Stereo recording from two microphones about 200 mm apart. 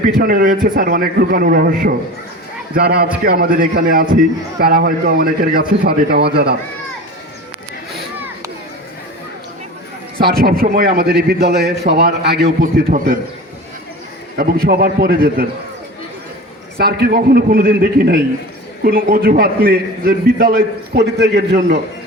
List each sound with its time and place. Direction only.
0.2 s a man's voice: 45° right (ahead or behind)
10.2 s a man's voice: 50° right (ahead or behind)
14.3 s a man's voice: 50° right (ahead or behind)
16.7 s a man's voice: 50° right (ahead or behind)